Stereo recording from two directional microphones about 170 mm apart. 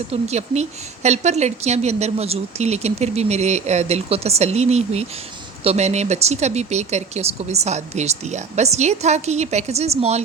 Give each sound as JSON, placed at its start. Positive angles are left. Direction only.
{"t": 0.1, "sound": "a woman's voice", "side_deg": -40}